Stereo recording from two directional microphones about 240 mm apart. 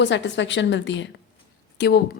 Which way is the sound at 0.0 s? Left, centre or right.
Left.